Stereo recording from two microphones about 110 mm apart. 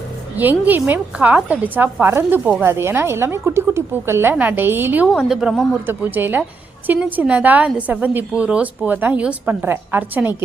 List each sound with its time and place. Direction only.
0.3 s a woman's voice: 15° right (ahead or behind)
5.0 s a woman's voice: 5° right (ahead or behind)
5.8 s a woman's voice: 20° right (ahead or behind)